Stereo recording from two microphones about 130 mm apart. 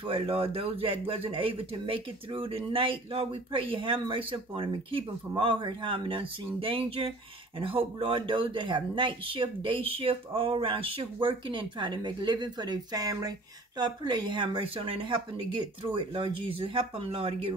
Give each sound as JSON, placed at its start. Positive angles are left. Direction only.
{"t": 0.0, "sound": "speech", "side_deg": -45}